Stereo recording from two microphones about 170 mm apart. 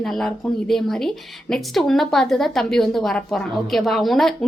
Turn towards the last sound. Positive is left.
turn(degrees=0)  # may be behind; listen again after turning